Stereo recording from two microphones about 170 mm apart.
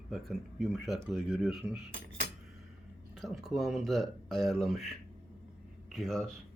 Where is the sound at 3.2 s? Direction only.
Centre (ahead or behind).